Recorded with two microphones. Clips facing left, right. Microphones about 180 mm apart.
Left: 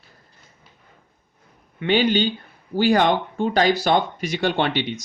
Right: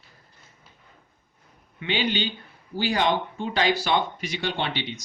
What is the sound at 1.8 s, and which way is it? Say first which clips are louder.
Speech: left 8 dB; 50° left (ahead or behind).